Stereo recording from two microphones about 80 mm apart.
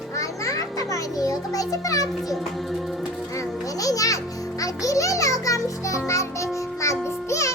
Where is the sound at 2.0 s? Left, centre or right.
Centre.